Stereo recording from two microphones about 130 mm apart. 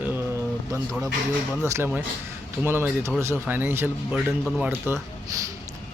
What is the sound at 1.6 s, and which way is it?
Speech, 20° right (ahead or behind).